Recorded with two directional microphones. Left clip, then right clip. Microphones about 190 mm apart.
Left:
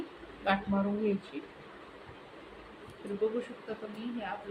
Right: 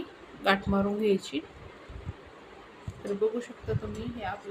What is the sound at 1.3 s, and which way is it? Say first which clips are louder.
Speech: right 8 dB; 45° right (ahead or behind).